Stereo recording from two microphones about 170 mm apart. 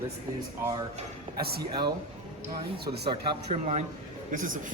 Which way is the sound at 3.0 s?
40° right (ahead or behind).